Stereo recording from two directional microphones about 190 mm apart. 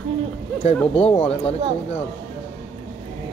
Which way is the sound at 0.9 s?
30° left (ahead or behind).